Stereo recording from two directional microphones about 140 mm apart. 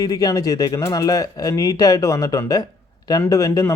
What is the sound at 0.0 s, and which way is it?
Speech, 25° left (ahead or behind).